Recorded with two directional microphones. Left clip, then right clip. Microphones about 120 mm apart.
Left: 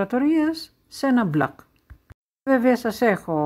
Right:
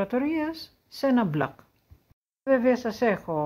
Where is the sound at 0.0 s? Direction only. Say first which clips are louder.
Left 6 dB; 35° left (ahead or behind).